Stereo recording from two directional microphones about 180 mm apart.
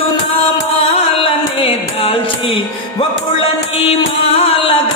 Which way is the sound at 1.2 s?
30° left (ahead or behind).